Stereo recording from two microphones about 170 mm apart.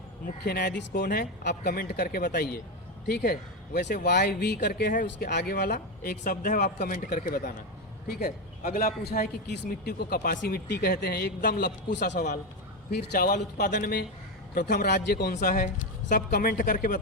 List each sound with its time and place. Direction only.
0.4 s a man's voice: 70° left (ahead or behind)
1.0 s a man's voice: 60° left (ahead or behind); by 12.2 s 90° left
12.9 s speech: 70° left (ahead or behind); by 13.7 s 55° left (ahead or behind)
13.7 s a man's voice: 80° left
14.5 s speech: 60° left (ahead or behind)